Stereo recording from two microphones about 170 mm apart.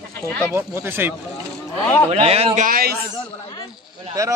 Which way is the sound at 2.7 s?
60° right (ahead or behind).